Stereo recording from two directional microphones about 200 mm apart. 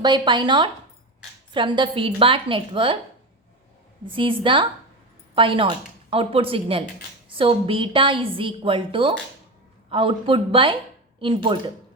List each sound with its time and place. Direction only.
0.0 s a woman's voice: 20° right (ahead or behind)
4.1 s a woman's voice: 25° right (ahead or behind)